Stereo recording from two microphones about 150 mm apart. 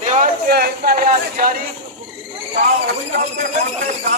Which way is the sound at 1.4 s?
70° right (ahead or behind).